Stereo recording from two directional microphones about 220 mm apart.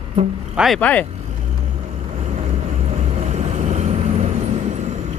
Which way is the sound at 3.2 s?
30° right (ahead or behind).